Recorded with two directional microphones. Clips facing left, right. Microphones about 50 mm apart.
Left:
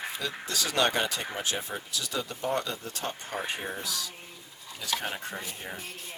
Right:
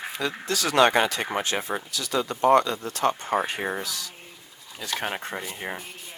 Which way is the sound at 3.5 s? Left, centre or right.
Right.